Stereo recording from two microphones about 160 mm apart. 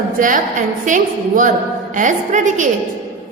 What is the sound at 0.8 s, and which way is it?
A woman's voice, 55° right (ahead or behind).